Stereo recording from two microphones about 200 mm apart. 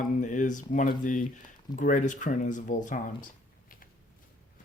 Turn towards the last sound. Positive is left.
turn(degrees=40)  # may be behind; listen again after turning